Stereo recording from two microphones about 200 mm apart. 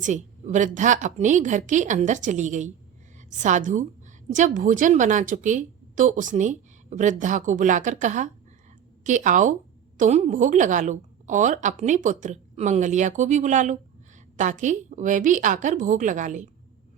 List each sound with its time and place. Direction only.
0.0 s a woman's voice: 35° right (ahead or behind)